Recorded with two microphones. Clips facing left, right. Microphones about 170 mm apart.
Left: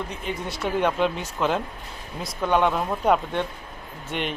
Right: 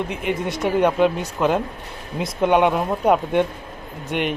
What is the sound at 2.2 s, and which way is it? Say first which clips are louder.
Speech: right 5 dB; 20° right (ahead or behind).